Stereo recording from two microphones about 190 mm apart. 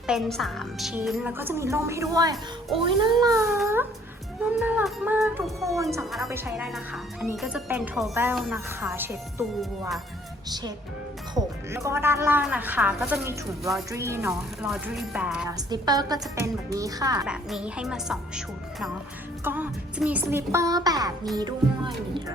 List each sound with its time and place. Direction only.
0.1 s a woman's voice: centre (ahead or behind)
6.3 s speech: 10° right (ahead or behind)
6.7 s a woman's voice: centre (ahead or behind)
11.3 s a woman's voice: 15° right (ahead or behind)
15.4 s speech: 20° right (ahead or behind)
17.2 s a woman's voice: 5° right (ahead or behind); by 22.2 s 20° right (ahead or behind)